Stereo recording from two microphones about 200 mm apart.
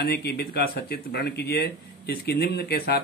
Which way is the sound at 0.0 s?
55° left (ahead or behind).